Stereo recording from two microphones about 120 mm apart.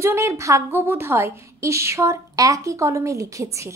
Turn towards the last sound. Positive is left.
turn(degrees=-25)  # may be behind; listen again after turning